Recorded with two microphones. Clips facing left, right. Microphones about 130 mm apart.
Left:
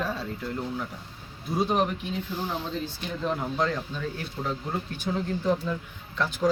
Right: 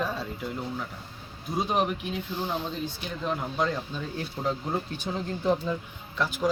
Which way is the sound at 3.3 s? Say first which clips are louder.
Left 1 dB; 5° right (ahead or behind).